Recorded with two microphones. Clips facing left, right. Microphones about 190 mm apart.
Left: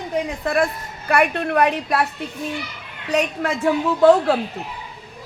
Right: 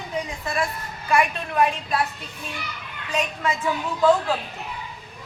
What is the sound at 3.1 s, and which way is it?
A woman's voice, 65° left (ahead or behind).